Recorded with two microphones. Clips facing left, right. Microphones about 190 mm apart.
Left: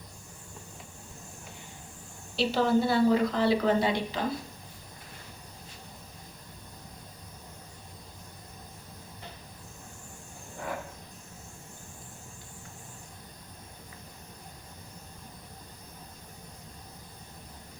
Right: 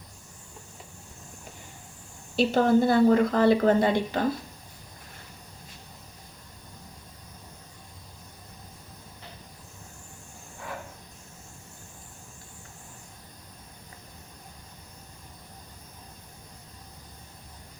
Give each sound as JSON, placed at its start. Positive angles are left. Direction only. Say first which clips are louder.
{"t": 2.3, "sound": "a woman's voice", "louder": "right 4 dB", "side_deg": -50}